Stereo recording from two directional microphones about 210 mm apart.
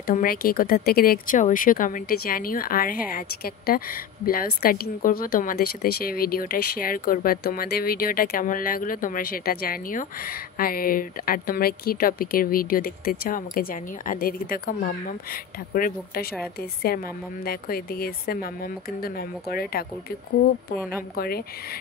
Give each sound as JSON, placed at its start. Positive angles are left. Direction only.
{"t": 0.0, "sound": "a woman's voice", "side_deg": 40}